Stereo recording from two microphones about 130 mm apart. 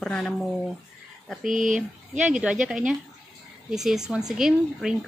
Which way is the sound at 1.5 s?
85° right.